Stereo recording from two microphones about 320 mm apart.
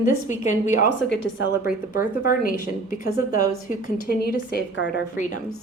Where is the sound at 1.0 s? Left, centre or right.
Left.